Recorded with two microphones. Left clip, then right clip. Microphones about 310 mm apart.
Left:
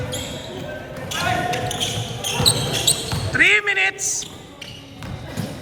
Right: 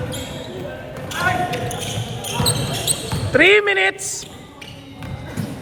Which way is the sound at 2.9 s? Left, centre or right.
Centre.